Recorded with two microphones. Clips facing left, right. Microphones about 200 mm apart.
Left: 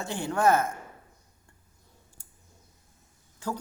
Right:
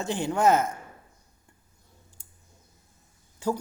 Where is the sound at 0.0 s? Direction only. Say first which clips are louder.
Right 2 dB; 20° right (ahead or behind).